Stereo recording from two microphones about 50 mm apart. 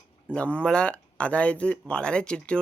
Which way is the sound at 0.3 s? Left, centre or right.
Left.